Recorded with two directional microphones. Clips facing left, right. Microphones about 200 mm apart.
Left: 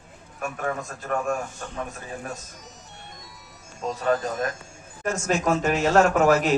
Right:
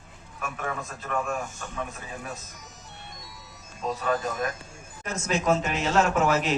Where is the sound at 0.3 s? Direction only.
45° left (ahead or behind).